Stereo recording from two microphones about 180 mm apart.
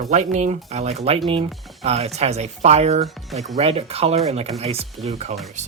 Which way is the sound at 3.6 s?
35° right (ahead or behind).